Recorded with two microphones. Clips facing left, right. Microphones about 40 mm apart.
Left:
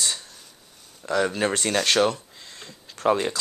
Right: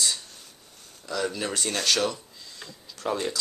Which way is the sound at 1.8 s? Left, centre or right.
Left.